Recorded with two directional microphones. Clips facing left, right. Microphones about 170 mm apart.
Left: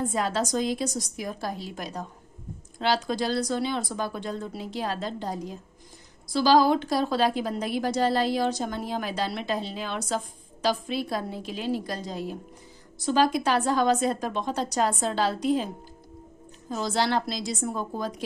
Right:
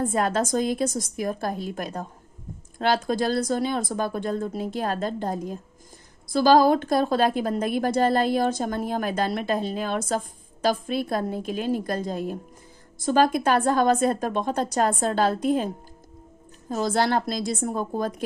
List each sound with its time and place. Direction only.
0.0 s a woman's voice: 50° right (ahead or behind)